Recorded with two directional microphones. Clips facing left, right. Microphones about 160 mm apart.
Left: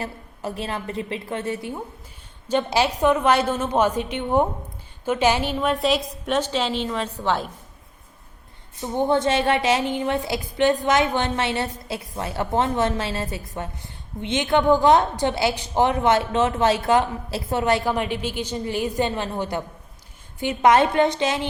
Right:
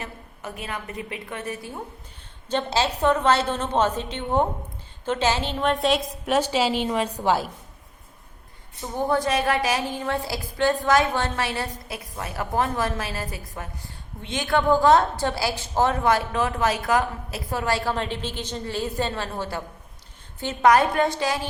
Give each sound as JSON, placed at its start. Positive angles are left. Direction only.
{"t": 0.0, "sound": "a woman's voice", "side_deg": 30}
{"t": 2.5, "sound": "a woman's voice", "side_deg": 10}
{"t": 5.5, "sound": "a woman's voice", "side_deg": 0}
{"t": 9.0, "sound": "a woman's voice", "side_deg": 25}